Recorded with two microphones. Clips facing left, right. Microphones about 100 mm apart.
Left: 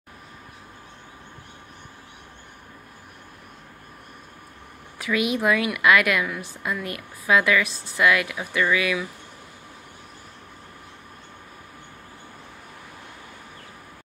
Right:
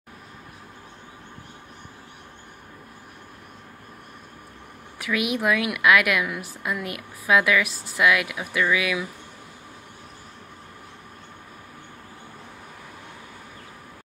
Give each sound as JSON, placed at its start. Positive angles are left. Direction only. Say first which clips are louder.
{"t": 4.9, "sound": "a woman's voice", "louder": "left 2 dB", "side_deg": -5}